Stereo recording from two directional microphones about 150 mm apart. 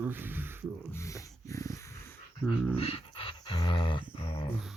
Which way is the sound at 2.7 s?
40° left (ahead or behind).